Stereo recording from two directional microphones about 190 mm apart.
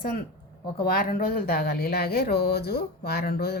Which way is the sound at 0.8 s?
50° left (ahead or behind).